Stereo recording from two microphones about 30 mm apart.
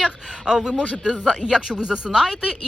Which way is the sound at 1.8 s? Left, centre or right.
Right.